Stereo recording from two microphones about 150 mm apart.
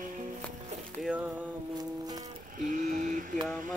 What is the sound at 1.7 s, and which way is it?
Music, 25° right (ahead or behind).